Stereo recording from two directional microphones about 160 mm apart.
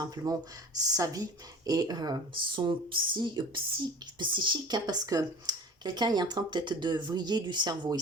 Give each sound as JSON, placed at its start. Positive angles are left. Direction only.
{"t": 0.0, "sound": "speech", "side_deg": -25}